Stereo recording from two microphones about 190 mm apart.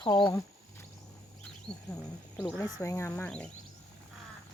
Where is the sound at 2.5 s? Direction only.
20° left (ahead or behind).